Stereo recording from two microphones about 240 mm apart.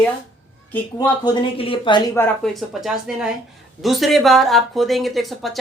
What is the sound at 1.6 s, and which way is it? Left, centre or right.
Speech, left.